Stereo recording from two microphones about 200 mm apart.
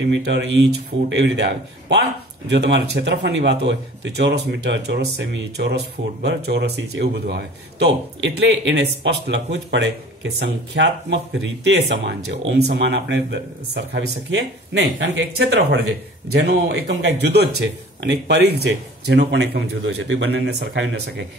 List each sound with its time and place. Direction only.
0.0 s speech: 60° right (ahead or behind)